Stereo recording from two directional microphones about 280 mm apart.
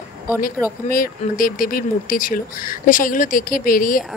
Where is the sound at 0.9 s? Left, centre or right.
Left.